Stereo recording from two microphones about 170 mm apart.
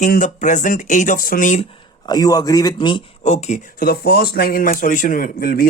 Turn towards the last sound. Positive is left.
turn(degrees=60)  # may be behind; listen again after turning